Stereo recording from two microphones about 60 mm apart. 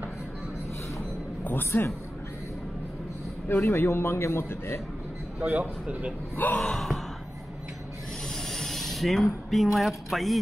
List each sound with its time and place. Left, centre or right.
1.4 s music: left
1.7 s a man's voice: left
3.4 s a man's voice: left
5.4 s a man's voice: right
6.3 s speech: left
6.6 s speech: centre
8.3 s mechanisms: centre
9.5 s speech: centre